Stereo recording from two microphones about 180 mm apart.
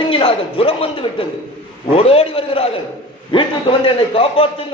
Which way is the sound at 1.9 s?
30° left (ahead or behind).